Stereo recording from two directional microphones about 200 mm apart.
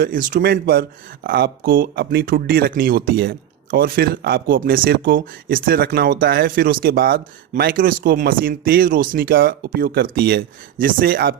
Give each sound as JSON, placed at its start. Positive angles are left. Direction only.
{"t": 0.0, "sound": "speech", "side_deg": -45}